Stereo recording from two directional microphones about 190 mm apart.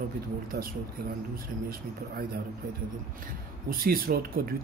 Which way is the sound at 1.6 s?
50° right (ahead or behind).